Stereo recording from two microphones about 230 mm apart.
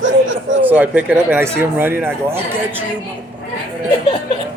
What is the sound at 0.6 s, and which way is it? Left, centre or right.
Speech, centre.